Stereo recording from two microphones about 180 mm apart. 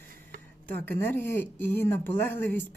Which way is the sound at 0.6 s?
10° left (ahead or behind).